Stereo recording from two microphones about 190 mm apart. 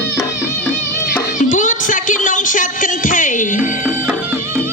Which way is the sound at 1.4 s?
40° left (ahead or behind).